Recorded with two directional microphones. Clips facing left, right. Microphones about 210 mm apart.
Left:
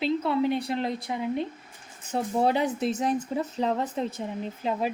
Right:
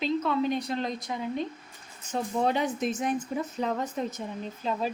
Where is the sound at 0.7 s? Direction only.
20° left (ahead or behind).